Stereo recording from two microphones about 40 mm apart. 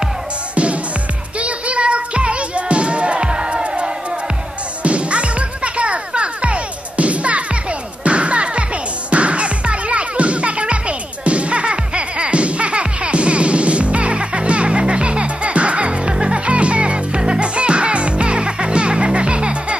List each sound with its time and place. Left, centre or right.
1.4 s music: right